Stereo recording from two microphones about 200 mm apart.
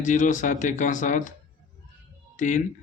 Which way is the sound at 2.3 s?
40° left (ahead or behind).